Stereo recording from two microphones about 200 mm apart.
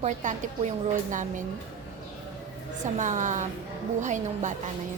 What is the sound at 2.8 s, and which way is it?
A woman's voice, 40° right (ahead or behind).